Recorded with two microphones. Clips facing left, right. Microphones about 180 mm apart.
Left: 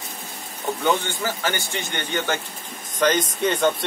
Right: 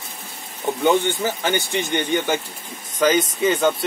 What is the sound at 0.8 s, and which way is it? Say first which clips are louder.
Speech: right 5 dB; 15° right (ahead or behind).